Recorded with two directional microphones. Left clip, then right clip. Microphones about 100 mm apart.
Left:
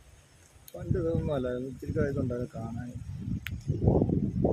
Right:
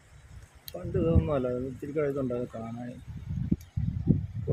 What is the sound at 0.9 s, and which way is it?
Speech, 10° right (ahead or behind).